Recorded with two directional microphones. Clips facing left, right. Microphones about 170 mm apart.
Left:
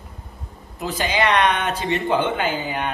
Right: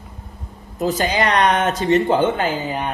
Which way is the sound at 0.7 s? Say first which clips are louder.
Right 4 dB; 40° right (ahead or behind).